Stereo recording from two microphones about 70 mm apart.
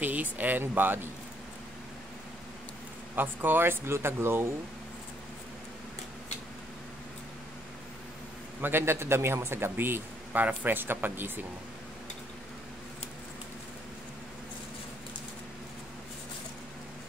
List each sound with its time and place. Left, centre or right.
0.0 s speech: right
3.2 s a man's voice: right
8.5 s a man's voice: right